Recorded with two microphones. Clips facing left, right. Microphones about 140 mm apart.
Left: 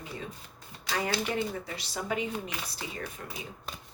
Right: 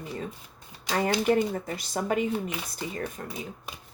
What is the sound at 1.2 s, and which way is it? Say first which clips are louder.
Speech: right 8 dB; 45° right (ahead or behind).